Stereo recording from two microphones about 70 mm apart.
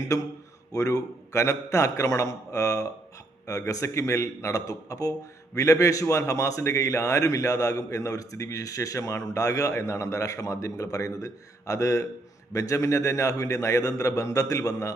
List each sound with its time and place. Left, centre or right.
0.7 s a man's voice: left